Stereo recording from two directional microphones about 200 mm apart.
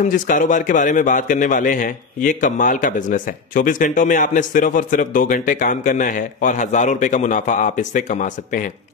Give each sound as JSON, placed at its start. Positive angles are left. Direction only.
{"t": 0.0, "sound": "a man's voice", "side_deg": 40}